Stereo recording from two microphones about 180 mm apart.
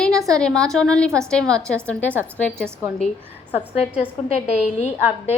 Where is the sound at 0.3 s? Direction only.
5° left (ahead or behind).